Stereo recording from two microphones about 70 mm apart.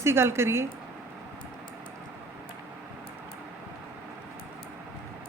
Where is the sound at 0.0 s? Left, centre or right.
Right.